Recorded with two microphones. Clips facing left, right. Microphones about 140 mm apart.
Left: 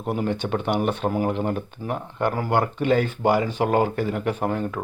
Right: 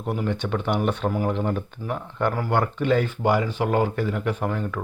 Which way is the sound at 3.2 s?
35° left (ahead or behind).